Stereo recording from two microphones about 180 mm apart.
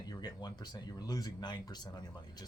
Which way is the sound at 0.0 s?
20° left (ahead or behind).